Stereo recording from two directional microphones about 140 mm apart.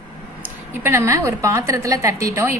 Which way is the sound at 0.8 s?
20° right (ahead or behind).